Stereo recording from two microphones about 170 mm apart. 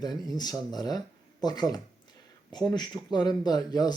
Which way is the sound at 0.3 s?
25° left (ahead or behind).